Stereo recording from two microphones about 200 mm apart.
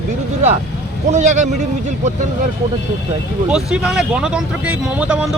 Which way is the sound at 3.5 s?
5° right (ahead or behind).